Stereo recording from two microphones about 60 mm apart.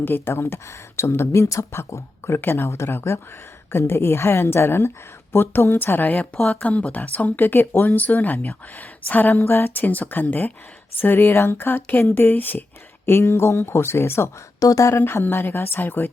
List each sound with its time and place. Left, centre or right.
0.0 s speech: left
9.4 s speech: left
13.1 s speech: left
14.6 s speech: left
15.0 s speech: left